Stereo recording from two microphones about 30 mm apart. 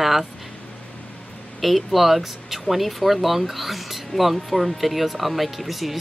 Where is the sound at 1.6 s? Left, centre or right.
Centre.